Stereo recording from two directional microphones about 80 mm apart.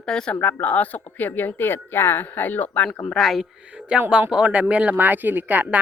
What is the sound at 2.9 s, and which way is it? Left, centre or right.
Speech, centre.